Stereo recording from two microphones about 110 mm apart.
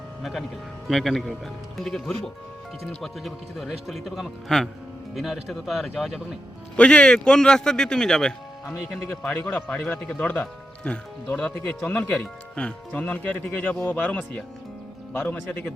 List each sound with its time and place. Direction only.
0.2 s a man's voice: centre (ahead or behind)
6.7 s speech: 10° left (ahead or behind)
9.2 s speech: 15° left (ahead or behind)